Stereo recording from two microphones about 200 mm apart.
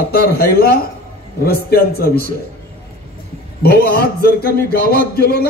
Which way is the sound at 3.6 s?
50° left (ahead or behind).